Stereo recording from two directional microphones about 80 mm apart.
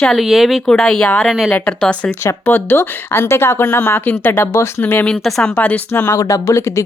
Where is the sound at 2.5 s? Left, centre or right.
Left.